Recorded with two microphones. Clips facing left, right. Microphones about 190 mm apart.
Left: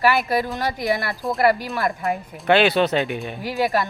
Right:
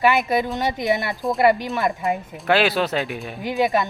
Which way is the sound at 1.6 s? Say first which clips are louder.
Right 1 dB; 20° right (ahead or behind).